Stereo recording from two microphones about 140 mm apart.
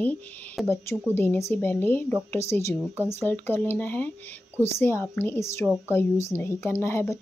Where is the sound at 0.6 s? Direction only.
Centre (ahead or behind).